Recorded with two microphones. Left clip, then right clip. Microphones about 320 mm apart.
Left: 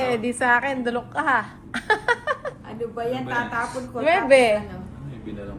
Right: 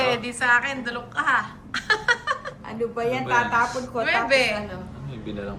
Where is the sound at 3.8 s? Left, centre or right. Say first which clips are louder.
Left 2 dB; centre.